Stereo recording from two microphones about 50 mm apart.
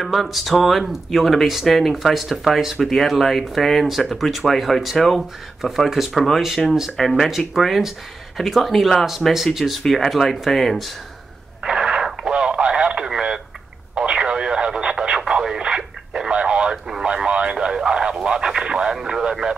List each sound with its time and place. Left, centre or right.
0.0 s speech: centre
11.6 s radio: centre
17.1 s radio: centre